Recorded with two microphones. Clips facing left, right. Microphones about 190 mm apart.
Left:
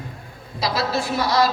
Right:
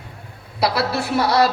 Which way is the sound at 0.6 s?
65° right (ahead or behind).